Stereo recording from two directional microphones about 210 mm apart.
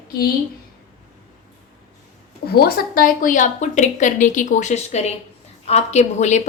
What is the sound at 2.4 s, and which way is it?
A woman's voice, 50° left (ahead or behind).